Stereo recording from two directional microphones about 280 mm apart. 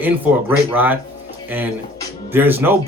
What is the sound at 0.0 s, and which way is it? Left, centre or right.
Speech, centre.